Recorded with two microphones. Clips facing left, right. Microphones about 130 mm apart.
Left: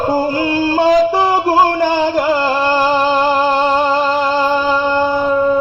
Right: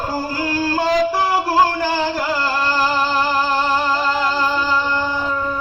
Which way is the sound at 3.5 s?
20° left (ahead or behind).